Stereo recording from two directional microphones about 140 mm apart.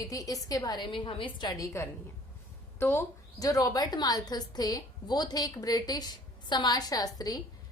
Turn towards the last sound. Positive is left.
turn(degrees=25)  # may be behind; listen again after turning